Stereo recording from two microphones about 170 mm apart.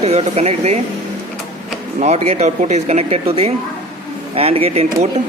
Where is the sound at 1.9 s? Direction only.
40° right (ahead or behind).